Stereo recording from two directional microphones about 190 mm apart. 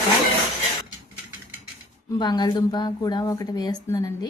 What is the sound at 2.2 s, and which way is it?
A woman's voice, 20° left (ahead or behind).